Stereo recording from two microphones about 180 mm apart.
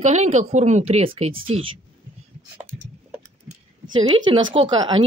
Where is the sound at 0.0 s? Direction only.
40° right (ahead or behind).